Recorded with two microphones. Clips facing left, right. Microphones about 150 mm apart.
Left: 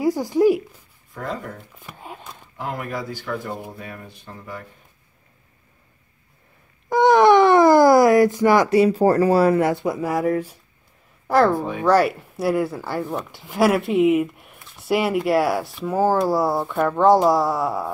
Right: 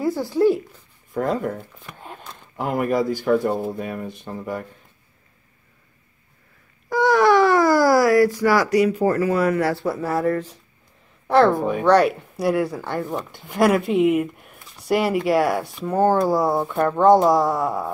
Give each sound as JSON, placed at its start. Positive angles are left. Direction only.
{"t": 0.0, "sound": "speech", "side_deg": 15}
{"t": 1.1, "sound": "speech", "side_deg": -50}
{"t": 1.8, "sound": "a sound", "side_deg": 5}
{"t": 2.5, "sound": "speech", "side_deg": -50}
{"t": 6.9, "sound": "speech", "side_deg": 20}